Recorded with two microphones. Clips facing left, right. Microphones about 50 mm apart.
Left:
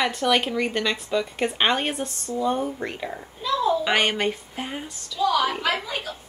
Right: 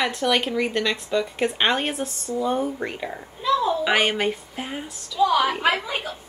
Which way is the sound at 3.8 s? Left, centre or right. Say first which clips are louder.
Right 1 dB; centre.